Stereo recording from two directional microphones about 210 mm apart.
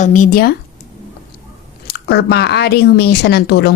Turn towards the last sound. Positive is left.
turn(degrees=50)  # may be behind; listen again after turning